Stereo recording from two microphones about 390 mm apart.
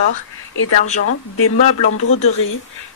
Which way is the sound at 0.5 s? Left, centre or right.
Left.